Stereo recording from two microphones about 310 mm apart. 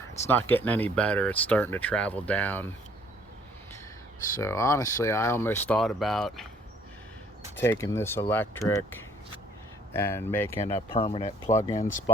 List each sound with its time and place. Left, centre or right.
0.3 s speech: centre
4.4 s speech: centre
7.6 s speech: centre